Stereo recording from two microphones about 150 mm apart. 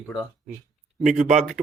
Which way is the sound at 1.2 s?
55° right (ahead or behind).